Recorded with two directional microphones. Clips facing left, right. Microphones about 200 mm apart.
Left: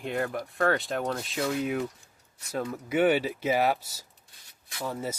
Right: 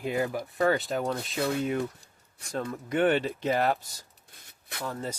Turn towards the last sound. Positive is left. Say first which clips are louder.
# left 1 dB
turn(degrees=10)  # may be behind; listen again after turning